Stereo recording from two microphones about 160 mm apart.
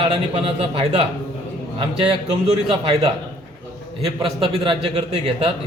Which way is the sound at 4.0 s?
35° right (ahead or behind).